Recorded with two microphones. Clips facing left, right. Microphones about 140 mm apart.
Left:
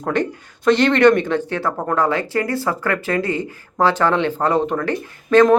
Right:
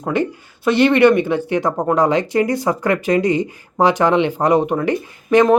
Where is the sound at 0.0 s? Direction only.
10° right (ahead or behind).